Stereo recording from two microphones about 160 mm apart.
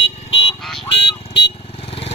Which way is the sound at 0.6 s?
Centre (ahead or behind).